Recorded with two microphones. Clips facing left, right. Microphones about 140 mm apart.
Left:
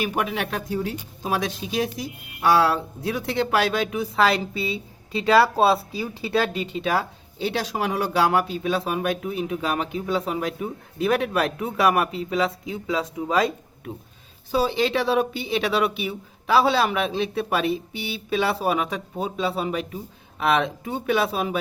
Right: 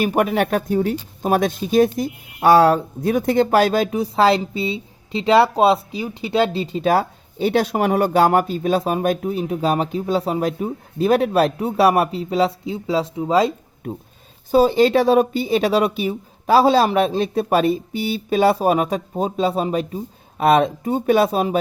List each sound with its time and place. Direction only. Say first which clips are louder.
0.0 s speech: right 7 dB; 45° right (ahead or behind); by 13.5 s 25° right (ahead or behind)
14.5 s speech: right 8 dB; 45° right (ahead or behind)